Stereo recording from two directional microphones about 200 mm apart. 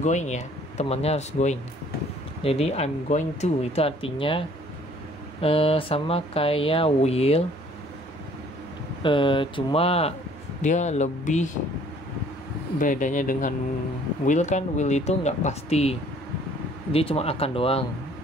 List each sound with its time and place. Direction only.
0.0 s speech: 35° left (ahead or behind)
9.0 s speech: 25° left (ahead or behind)
12.7 s speech: 40° left (ahead or behind)